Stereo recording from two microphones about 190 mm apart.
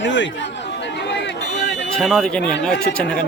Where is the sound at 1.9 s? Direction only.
5° left (ahead or behind).